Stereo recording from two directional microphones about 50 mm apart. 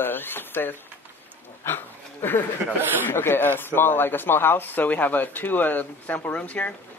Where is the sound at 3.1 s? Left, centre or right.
Left.